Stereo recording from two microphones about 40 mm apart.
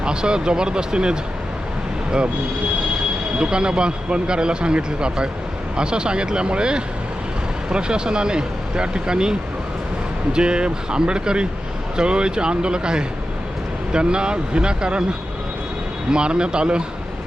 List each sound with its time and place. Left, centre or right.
0.0 s speech: right
3.3 s speech: right
10.3 s speech: right
16.1 s speech: right